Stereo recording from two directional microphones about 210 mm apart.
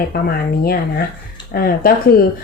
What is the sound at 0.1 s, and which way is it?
Speech, 45° left (ahead or behind).